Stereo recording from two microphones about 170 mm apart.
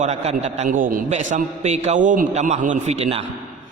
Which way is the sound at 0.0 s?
40° right (ahead or behind).